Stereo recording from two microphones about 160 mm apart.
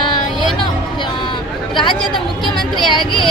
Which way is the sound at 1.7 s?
30° left (ahead or behind).